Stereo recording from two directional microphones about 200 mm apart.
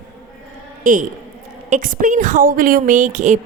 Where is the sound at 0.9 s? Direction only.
40° right (ahead or behind).